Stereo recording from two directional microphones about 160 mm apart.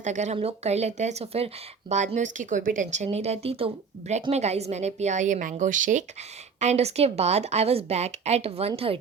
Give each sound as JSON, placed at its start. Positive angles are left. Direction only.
{"t": 0.0, "sound": "a woman's voice", "side_deg": -50}
{"t": 1.9, "sound": "a woman's voice", "side_deg": -50}